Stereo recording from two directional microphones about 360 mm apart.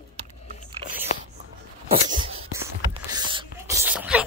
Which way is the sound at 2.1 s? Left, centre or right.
Centre.